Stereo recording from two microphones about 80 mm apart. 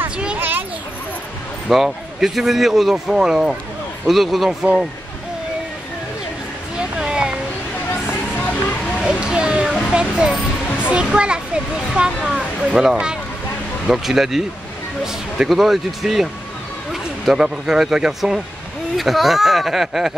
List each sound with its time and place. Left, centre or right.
0.4 s children playing: right
1.7 s speech: centre
6.8 s a sound: centre
8.4 s music: left
9.0 s a sound: centre
9.9 s speech: centre